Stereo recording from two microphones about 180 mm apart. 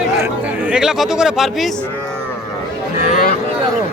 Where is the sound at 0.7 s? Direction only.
5° right (ahead or behind).